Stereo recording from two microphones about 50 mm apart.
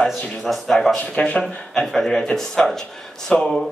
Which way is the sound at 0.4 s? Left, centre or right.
Centre.